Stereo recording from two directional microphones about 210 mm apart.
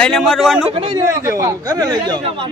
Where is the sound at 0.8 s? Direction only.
15° right (ahead or behind).